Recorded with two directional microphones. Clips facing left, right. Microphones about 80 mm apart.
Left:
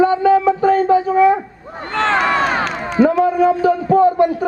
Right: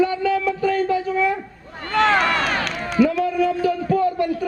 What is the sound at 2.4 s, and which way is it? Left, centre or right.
A man's voice, left.